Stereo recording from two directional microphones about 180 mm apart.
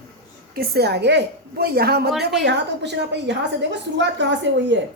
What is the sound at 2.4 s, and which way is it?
A woman's voice, 75° right (ahead or behind).